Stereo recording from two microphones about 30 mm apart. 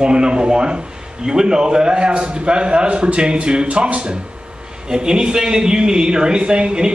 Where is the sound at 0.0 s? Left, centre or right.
Right.